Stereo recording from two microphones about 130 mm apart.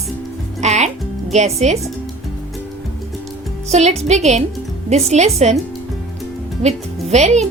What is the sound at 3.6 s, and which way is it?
A woman's voice, 60° right (ahead or behind).